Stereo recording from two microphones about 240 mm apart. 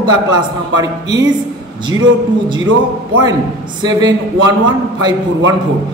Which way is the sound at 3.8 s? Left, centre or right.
Centre.